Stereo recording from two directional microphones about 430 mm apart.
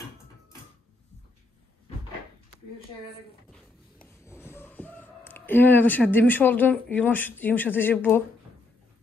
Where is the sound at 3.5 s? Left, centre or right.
Centre.